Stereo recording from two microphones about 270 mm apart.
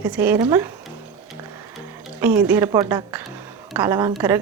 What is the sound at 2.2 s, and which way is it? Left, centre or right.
A woman's voice, centre.